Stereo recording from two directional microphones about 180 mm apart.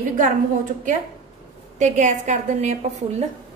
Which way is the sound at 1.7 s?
40° right (ahead or behind).